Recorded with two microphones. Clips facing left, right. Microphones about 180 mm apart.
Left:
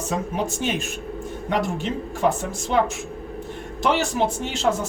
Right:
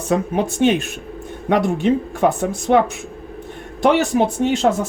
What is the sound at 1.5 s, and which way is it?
Speech, 60° right (ahead or behind).